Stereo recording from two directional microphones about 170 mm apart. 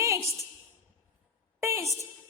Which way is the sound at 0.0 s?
15° right (ahead or behind).